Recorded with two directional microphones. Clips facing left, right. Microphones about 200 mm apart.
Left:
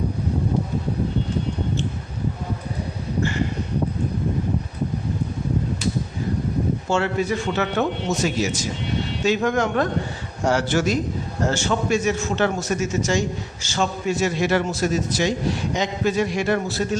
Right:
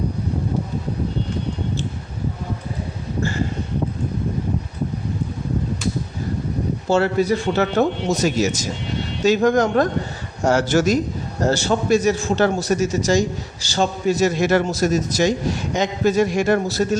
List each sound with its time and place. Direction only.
6.8 s a man's voice: 35° right (ahead or behind)